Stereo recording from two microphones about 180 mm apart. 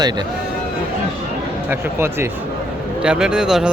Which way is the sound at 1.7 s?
15° right (ahead or behind).